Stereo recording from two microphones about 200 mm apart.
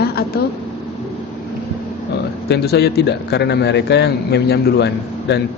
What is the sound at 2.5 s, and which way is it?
A man's voice, 55° left (ahead or behind).